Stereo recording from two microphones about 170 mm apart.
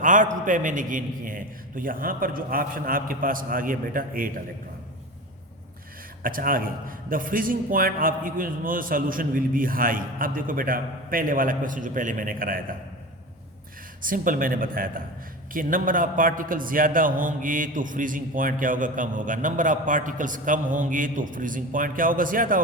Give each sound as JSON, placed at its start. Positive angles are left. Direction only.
{"t": 0.0, "sound": "a man's voice", "side_deg": -50}
{"t": 6.2, "sound": "a man's voice", "side_deg": -55}
{"t": 14.0, "sound": "a man's voice", "side_deg": -55}